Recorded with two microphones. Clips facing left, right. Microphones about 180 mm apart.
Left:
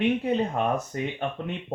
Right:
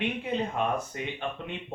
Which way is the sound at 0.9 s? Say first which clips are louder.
Left 6 dB; 40° left (ahead or behind).